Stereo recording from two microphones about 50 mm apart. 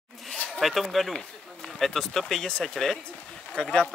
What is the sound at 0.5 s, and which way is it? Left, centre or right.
Speech, centre.